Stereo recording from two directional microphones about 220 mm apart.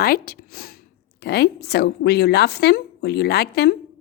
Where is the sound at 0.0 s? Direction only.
45° left (ahead or behind).